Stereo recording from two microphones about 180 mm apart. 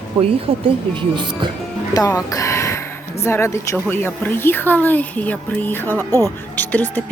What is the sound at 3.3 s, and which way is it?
A woman's voice, 15° left (ahead or behind).